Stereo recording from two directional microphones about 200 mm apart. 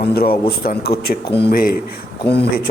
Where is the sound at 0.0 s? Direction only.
50° left (ahead or behind).